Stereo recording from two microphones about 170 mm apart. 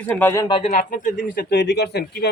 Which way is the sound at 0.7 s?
50° left (ahead or behind).